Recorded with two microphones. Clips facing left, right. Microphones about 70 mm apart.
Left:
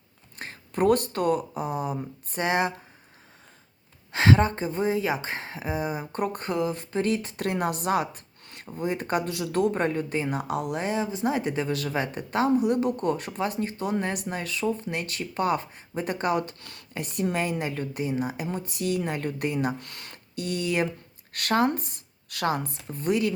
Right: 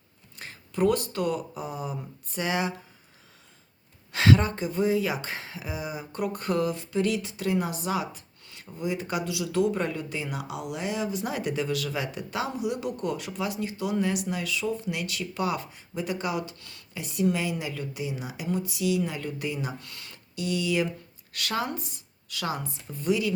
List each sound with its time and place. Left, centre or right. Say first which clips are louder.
0.3 s speech: left 1 dB; left
4.1 s speech: left 1 dB; left
6.5 s speech: right 2 dB; left
6.7 s speech: left 1 dB; left